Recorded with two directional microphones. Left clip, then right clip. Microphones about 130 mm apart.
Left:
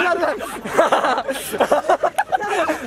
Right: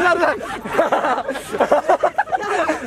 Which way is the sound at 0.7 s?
25° left (ahead or behind).